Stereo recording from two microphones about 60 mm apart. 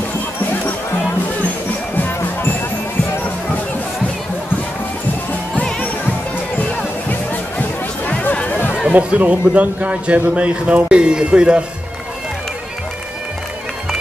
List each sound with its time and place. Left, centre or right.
2.0 s music: left
6.6 s music: left
8.8 s a man's voice: right